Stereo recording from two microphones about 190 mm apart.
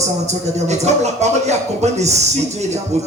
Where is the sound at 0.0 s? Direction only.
35° right (ahead or behind).